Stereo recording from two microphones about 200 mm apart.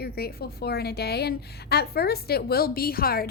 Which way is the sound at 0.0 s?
50° left (ahead or behind).